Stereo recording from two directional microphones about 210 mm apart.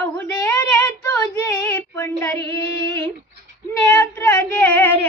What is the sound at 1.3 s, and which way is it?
Female singing, 5° left (ahead or behind).